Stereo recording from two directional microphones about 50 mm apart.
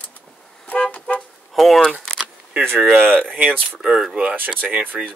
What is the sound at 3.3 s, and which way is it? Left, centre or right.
Speech, right.